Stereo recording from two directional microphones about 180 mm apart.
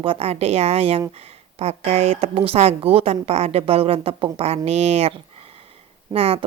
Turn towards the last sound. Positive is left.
turn(degrees=-35)  # may be behind; listen again after turning